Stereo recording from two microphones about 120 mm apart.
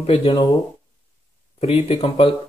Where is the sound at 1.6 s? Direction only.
55° left (ahead or behind).